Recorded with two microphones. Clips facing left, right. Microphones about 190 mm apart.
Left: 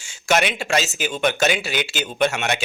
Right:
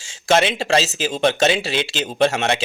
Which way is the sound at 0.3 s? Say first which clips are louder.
Right 3 dB; 30° right (ahead or behind).